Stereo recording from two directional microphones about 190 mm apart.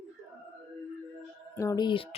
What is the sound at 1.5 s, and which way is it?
Speech, 20° left (ahead or behind).